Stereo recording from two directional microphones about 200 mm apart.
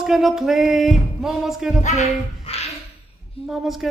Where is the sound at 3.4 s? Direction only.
Centre (ahead or behind).